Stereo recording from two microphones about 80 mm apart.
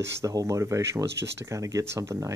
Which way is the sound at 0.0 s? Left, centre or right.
Right.